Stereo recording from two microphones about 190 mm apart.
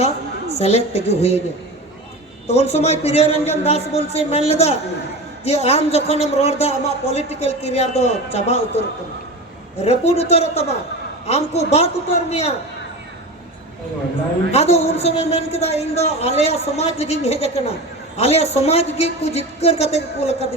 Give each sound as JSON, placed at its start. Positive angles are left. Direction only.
{"t": 0.0, "sound": "a sound", "side_deg": 35}
{"t": 2.5, "sound": "a man's voice", "side_deg": 35}
{"t": 9.8, "sound": "a man's voice", "side_deg": 35}
{"t": 14.5, "sound": "a man's voice", "side_deg": 35}